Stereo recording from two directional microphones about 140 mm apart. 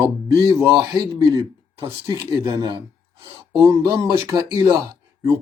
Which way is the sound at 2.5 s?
35° right (ahead or behind).